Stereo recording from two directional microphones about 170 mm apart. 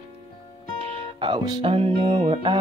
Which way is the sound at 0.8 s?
30° right (ahead or behind).